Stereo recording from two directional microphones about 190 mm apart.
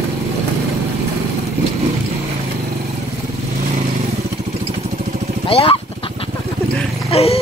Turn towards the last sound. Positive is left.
turn(degrees=30)  # may be behind; listen again after turning